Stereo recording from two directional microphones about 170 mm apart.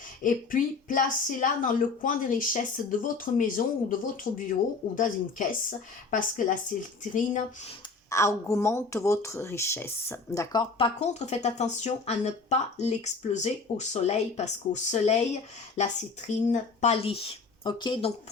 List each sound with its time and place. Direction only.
0.2 s a woman's voice: 50° left (ahead or behind)
8.1 s speech: 15° left (ahead or behind)
11.0 s a woman's voice: 40° left (ahead or behind)